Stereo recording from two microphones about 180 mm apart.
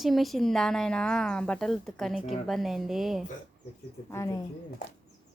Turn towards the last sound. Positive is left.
turn(degrees=15)  # may be behind; listen again after turning